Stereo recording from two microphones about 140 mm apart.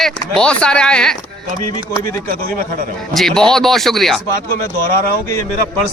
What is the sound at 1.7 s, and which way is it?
Speech, 20° left (ahead or behind).